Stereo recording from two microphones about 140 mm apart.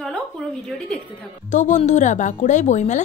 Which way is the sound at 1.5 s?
60° left (ahead or behind).